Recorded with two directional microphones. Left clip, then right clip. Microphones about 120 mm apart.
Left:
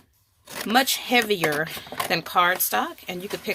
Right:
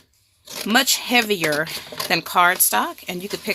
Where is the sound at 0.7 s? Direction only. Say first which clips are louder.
Right 3 dB; 40° right (ahead or behind).